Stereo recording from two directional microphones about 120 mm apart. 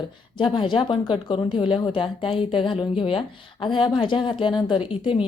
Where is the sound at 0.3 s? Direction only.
45° left (ahead or behind).